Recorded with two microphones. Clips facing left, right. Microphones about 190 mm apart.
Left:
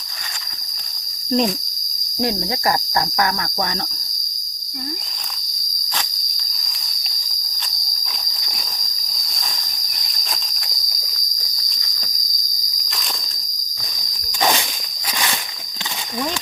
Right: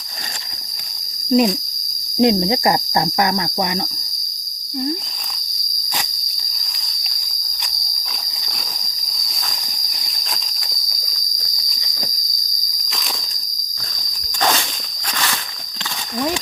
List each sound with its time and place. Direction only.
1.3 s speech: 5° right (ahead or behind)
2.1 s cricket: 20° right (ahead or behind)
10.2 s cricket: centre (ahead or behind)